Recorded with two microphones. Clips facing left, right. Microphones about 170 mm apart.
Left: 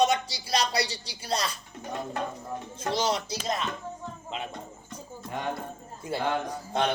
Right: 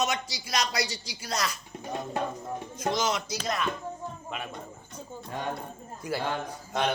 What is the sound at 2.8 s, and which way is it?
Speech, 30° left (ahead or behind).